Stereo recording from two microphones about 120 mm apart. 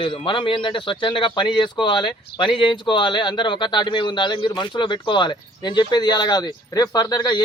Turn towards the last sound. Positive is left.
turn(degrees=35)  # may be behind; listen again after turning